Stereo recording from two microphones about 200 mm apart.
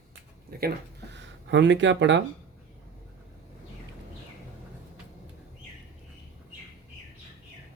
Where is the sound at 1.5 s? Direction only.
65° right (ahead or behind).